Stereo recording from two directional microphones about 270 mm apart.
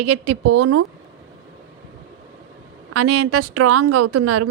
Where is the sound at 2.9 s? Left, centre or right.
Right.